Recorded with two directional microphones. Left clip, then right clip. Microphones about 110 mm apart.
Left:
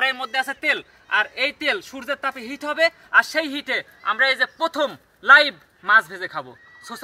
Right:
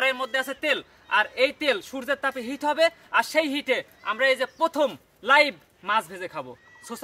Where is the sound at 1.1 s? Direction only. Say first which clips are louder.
Left 1 dB; 35° right (ahead or behind).